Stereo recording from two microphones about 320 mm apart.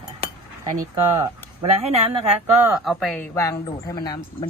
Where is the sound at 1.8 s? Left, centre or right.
Centre.